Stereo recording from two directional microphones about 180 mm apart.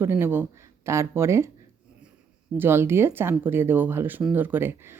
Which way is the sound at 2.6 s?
15° right (ahead or behind).